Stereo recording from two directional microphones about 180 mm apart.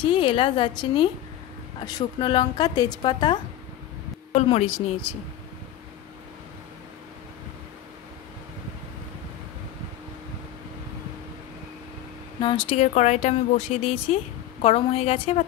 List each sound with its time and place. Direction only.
0.0 s a woman's voice: 30° left (ahead or behind)
4.3 s speech: 35° left (ahead or behind)
12.4 s speech: 25° left (ahead or behind)